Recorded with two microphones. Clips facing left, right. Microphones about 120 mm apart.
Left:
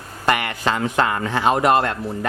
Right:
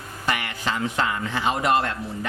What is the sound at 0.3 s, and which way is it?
A man's voice, 60° left (ahead or behind).